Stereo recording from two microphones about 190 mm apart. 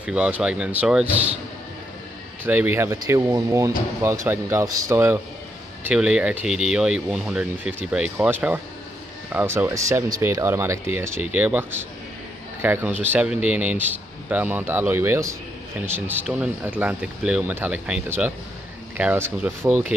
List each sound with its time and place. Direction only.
0.0 s speech: 5° right (ahead or behind)
2.4 s speech: 10° right (ahead or behind)